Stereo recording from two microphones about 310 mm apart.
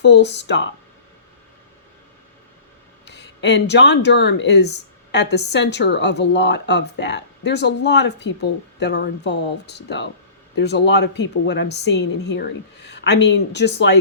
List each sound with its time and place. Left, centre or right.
0.0 s speech: left
3.1 s speech: left